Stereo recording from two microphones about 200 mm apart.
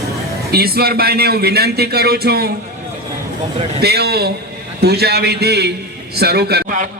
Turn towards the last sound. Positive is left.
turn(degrees=-45)  # may be behind; listen again after turning